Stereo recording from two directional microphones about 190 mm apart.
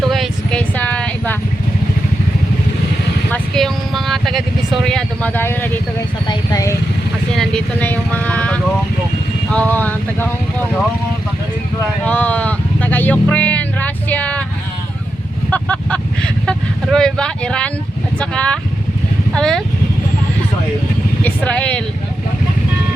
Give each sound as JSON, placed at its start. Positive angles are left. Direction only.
{"t": 0.1, "sound": "a sound", "side_deg": 5}
{"t": 3.3, "sound": "vehicle", "side_deg": 0}
{"t": 4.9, "sound": "speech", "side_deg": 5}
{"t": 7.3, "sound": "speech", "side_deg": 5}
{"t": 12.0, "sound": "a sound", "side_deg": 10}
{"t": 15.4, "sound": "speech", "side_deg": 5}
{"t": 21.2, "sound": "speech", "side_deg": 5}